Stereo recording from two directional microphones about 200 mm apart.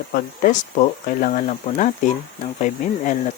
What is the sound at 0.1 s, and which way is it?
Speech, 40° left (ahead or behind).